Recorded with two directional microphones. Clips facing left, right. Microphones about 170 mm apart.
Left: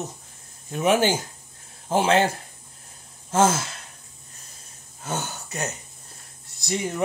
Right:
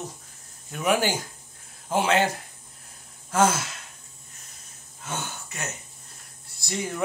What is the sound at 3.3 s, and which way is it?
Speech, 25° left (ahead or behind).